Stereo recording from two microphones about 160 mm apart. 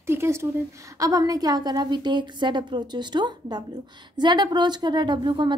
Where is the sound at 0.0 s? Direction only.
15° right (ahead or behind).